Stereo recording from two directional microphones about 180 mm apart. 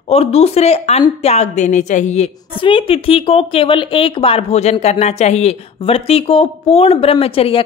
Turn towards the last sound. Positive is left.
turn(degrees=30)  # may be behind; listen again after turning